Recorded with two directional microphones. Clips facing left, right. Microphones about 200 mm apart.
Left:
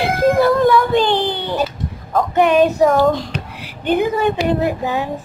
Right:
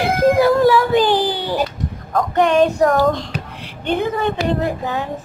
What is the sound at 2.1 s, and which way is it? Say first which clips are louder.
Child singing: left 1 dB; 5° left (ahead or behind).